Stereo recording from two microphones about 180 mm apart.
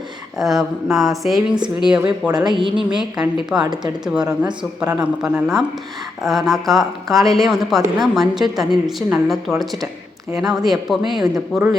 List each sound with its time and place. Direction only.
0.3 s speech: centre (ahead or behind)
2.2 s a woman's voice: 25° right (ahead or behind)
2.7 s speech: 5° right (ahead or behind)